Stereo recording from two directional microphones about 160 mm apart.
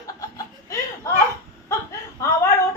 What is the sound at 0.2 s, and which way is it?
Laughter, 20° left (ahead or behind).